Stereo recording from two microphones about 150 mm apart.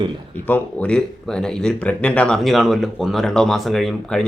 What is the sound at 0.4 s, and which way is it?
Speech, 10° left (ahead or behind).